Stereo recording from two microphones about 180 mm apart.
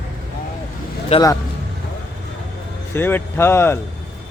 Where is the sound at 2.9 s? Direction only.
10° left (ahead or behind).